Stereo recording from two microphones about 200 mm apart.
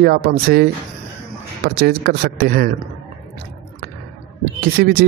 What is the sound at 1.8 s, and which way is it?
Speech, 50° right (ahead or behind).